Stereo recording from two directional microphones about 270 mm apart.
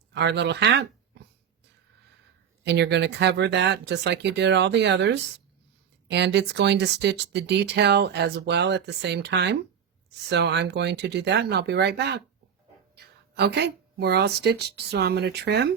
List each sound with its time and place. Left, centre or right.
0.1 s speech: right
2.6 s speech: right